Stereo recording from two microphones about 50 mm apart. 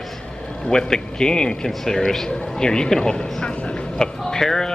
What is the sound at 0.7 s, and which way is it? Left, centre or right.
A man's voice, centre.